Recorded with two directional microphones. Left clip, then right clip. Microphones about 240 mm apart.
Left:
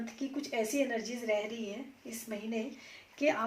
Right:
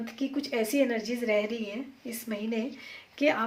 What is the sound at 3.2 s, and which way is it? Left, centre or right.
Speech, right.